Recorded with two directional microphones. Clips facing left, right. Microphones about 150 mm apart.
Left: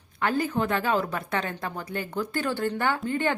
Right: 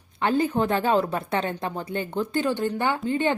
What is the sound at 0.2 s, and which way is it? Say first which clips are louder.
Speech: right 3 dB; 25° right (ahead or behind).